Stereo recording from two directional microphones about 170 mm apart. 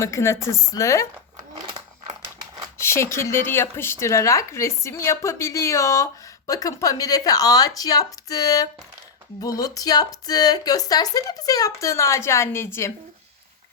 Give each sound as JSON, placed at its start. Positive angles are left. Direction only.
{"t": 0.0, "sound": "speech", "side_deg": 15}
{"t": 2.7, "sound": "speech", "side_deg": 15}